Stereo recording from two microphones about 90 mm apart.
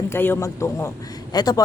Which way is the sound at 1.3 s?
50° left (ahead or behind).